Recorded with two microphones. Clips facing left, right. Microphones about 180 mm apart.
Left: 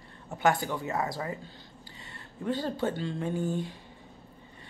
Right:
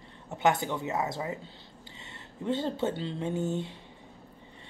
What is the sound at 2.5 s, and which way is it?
Speech, 25° right (ahead or behind).